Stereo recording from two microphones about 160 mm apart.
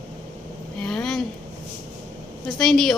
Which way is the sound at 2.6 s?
5° left (ahead or behind).